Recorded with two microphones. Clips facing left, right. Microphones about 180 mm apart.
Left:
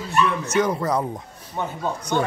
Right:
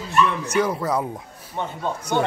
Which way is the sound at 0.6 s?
5° right (ahead or behind).